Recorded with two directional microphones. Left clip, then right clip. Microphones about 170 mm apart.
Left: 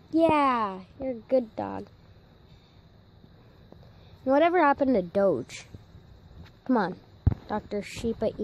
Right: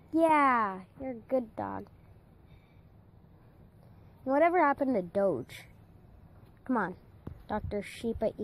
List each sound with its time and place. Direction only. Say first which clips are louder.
0.1 s a woman's voice: left 2 dB; 5° left (ahead or behind)
4.3 s a woman's voice: left 4 dB; 15° left (ahead or behind)
7.4 s a woman's voice: left 2 dB; 5° left (ahead or behind)